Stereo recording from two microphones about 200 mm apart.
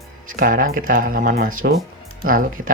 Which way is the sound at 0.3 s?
45° right (ahead or behind).